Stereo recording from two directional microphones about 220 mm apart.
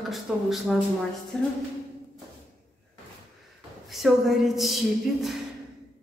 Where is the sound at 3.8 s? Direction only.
Centre (ahead or behind).